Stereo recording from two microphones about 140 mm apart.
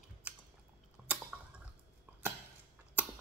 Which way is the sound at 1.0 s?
10° right (ahead or behind).